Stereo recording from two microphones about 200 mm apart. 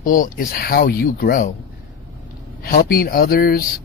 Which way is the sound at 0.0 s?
45° left (ahead or behind).